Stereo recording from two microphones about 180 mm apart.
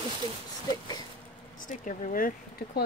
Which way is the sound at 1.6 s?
45° left (ahead or behind).